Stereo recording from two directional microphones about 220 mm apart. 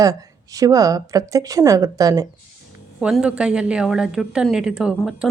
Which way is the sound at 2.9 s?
Centre (ahead or behind).